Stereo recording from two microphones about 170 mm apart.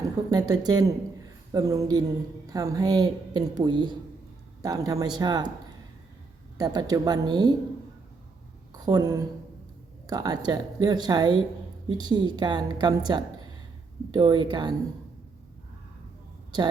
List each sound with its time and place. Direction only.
0.3 s speech: 25° right (ahead or behind)
6.6 s speech: 20° right (ahead or behind)
8.7 s a woman's voice: 25° right (ahead or behind)